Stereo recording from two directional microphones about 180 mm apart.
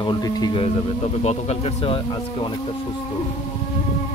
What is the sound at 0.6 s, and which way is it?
Speech, 35° left (ahead or behind).